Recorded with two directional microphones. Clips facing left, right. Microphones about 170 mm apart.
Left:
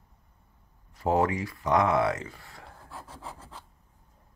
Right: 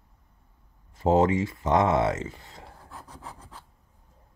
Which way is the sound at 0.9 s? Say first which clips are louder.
Right 4 dB; 25° right (ahead or behind).